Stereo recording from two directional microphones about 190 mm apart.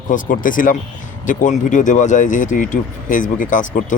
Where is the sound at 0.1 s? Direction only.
45° left (ahead or behind).